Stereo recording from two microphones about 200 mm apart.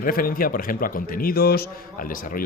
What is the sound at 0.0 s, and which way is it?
A man's voice, 45° left (ahead or behind).